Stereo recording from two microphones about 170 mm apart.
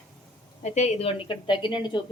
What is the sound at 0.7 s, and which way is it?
A woman's voice, 40° left (ahead or behind).